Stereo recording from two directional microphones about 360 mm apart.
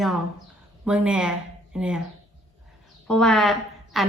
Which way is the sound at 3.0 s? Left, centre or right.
Centre.